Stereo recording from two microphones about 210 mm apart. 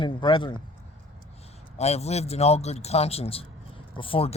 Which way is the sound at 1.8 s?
30° left (ahead or behind).